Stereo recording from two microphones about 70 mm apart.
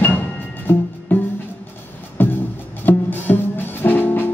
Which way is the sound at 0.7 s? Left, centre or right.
Left.